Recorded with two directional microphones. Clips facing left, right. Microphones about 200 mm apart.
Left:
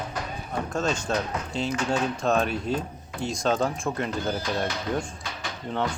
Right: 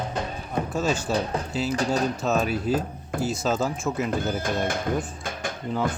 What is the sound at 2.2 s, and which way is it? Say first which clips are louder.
Speech: even; 5° right (ahead or behind).